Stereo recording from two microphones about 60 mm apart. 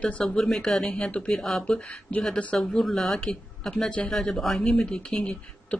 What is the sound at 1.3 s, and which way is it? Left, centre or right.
Speech, centre.